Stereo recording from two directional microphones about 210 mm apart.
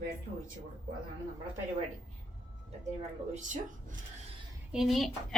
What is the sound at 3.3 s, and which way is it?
Speech, 35° right (ahead or behind).